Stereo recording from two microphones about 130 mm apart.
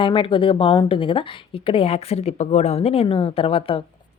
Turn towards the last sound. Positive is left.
turn(degrees=45)  # may be behind; listen again after turning